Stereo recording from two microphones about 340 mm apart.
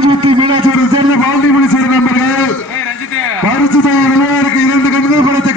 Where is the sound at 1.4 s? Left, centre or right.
Left.